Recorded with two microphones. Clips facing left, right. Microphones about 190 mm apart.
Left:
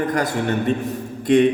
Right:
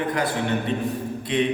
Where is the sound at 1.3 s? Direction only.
45° left (ahead or behind).